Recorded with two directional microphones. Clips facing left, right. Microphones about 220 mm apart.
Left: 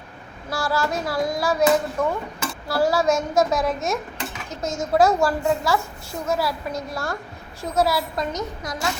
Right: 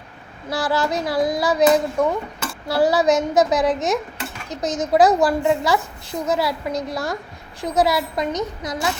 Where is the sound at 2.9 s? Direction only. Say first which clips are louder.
Right 3 dB; 20° right (ahead or behind).